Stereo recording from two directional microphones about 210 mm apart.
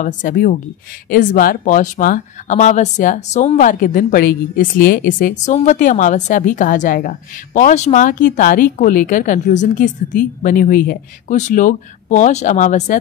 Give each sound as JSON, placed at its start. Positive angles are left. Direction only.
{"t": 0.0, "sound": "speech", "side_deg": 40}